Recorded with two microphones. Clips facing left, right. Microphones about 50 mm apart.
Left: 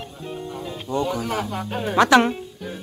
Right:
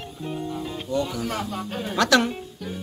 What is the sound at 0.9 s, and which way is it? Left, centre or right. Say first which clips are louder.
Speech: left 3 dB; left.